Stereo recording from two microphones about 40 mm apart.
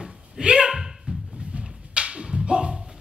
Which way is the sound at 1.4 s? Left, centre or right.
Right.